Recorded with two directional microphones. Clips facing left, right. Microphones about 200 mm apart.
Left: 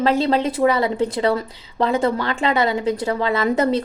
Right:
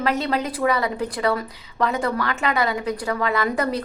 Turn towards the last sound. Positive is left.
turn(degrees=25)  # may be behind; listen again after turning